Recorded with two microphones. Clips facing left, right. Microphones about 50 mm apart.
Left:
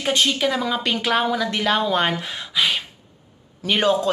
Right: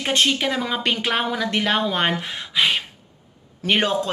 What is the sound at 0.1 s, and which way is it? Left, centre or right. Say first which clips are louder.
Speech: right 1 dB; right.